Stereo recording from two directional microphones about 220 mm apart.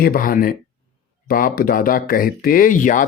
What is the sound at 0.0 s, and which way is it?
Speech, 40° left (ahead or behind).